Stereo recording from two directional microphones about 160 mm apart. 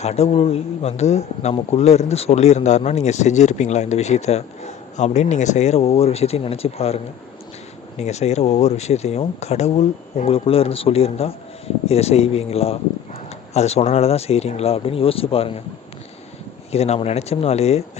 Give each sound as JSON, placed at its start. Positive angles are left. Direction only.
{"t": 0.0, "sound": "speech", "side_deg": 40}
{"t": 16.7, "sound": "speech", "side_deg": 40}